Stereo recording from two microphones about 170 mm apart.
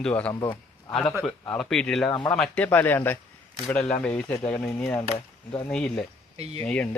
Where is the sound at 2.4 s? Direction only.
10° left (ahead or behind).